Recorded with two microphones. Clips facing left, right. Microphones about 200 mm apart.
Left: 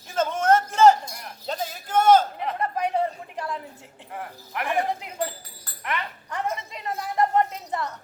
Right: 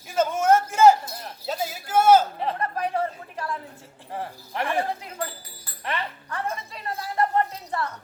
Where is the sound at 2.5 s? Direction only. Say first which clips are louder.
Left 4 dB; 20° left (ahead or behind).